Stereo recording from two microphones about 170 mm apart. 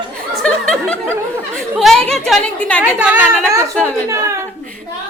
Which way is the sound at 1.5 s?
Centre (ahead or behind).